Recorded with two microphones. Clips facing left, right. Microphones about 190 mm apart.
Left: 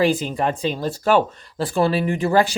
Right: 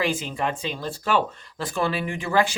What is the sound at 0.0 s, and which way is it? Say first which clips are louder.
Speech: left 6 dB; 35° left (ahead or behind).